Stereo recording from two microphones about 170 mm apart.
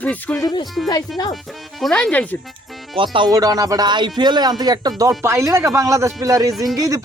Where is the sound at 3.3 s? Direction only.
20° right (ahead or behind).